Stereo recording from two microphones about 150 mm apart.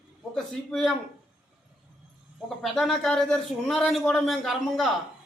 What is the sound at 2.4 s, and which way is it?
A man's voice, centre (ahead or behind).